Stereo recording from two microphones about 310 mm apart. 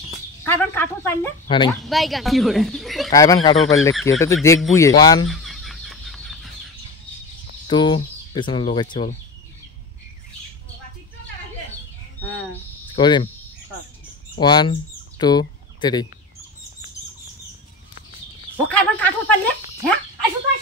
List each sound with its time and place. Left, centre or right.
0.4 s speech: centre
1.9 s speech: centre
3.1 s speech: centre
3.6 s speech: centre
5.3 s fowl: centre
7.7 s speech: centre
12.9 s speech: centre
14.4 s speech: centre
18.7 s a sound: centre